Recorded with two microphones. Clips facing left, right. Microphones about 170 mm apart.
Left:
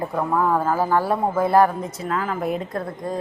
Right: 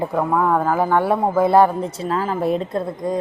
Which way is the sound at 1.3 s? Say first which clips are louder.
Right 3 dB; 25° right (ahead or behind).